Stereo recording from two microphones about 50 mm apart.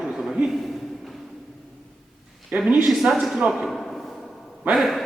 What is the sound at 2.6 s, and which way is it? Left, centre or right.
Speech, right.